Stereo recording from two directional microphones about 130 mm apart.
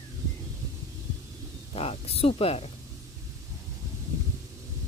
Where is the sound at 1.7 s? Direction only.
50° left (ahead or behind).